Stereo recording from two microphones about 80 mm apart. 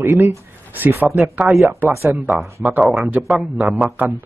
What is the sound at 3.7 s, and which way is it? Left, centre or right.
Speech, centre.